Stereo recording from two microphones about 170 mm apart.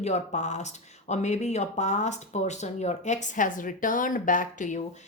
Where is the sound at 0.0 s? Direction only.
45° left (ahead or behind).